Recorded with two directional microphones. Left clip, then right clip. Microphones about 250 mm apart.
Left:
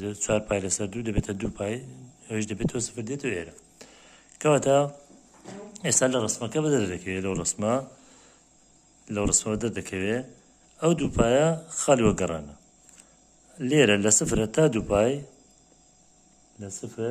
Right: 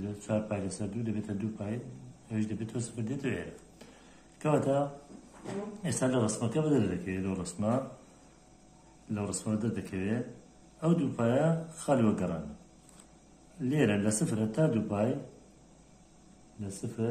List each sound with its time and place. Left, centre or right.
0.0 s speech: left
9.1 s speech: left
13.6 s speech: left
16.6 s speech: left